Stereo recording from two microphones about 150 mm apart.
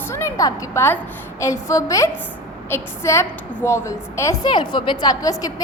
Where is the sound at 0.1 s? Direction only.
20° left (ahead or behind).